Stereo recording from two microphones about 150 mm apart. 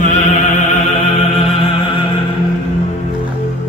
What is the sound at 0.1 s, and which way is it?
Opera, 50° left (ahead or behind).